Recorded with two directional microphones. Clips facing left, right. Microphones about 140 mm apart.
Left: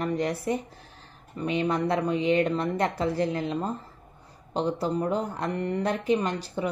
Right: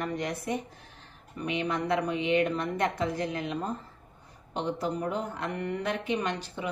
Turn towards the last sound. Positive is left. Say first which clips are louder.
# left 4 dB
turn(degrees=35)  # may be behind; listen again after turning